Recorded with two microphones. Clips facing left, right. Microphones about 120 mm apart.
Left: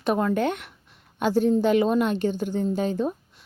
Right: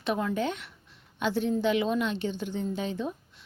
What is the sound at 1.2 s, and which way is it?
A woman's voice, 45° left (ahead or behind).